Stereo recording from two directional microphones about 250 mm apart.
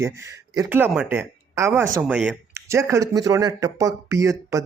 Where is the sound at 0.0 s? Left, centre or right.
Centre.